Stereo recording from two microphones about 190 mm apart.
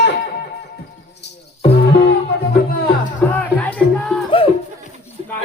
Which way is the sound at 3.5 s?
10° left (ahead or behind).